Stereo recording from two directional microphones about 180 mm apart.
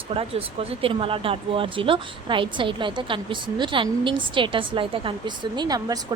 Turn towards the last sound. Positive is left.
turn(degrees=-20)  # may be behind; listen again after turning